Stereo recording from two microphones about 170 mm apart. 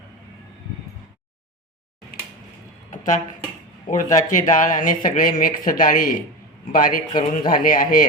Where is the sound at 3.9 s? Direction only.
50° left (ahead or behind).